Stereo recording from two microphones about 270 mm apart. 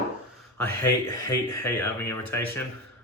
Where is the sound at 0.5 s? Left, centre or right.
Centre.